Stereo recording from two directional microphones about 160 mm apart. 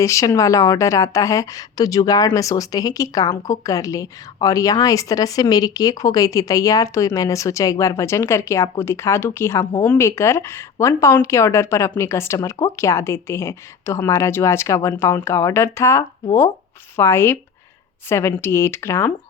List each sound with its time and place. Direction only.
0.0 s a woman's voice: 20° left (ahead or behind)